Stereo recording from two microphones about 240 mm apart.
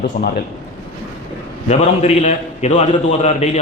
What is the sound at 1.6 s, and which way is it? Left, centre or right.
A man's voice, left.